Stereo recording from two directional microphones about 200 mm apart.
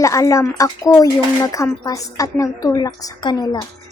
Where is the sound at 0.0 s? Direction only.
15° left (ahead or behind).